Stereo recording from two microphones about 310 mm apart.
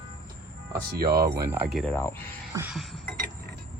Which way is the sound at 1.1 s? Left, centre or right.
Centre.